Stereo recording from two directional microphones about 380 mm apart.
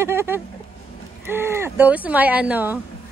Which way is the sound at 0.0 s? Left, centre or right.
Centre.